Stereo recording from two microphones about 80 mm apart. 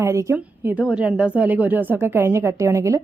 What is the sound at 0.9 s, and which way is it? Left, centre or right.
A woman's voice, centre.